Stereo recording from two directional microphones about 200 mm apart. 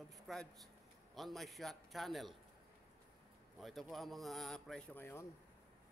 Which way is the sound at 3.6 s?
Centre (ahead or behind).